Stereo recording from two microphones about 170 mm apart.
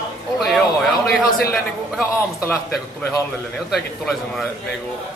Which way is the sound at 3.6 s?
Centre (ahead or behind).